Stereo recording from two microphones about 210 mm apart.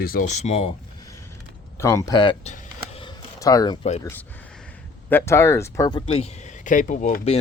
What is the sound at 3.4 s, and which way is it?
Speech, 15° left (ahead or behind).